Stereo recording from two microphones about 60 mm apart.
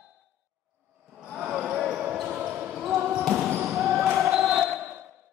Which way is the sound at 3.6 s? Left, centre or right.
Centre.